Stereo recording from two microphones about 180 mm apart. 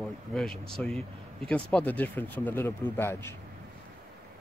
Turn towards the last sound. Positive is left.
turn(degrees=15)  # may be behind; listen again after turning